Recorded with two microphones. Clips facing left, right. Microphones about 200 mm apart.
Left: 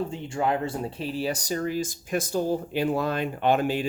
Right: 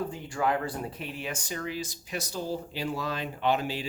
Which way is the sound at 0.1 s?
25° left (ahead or behind).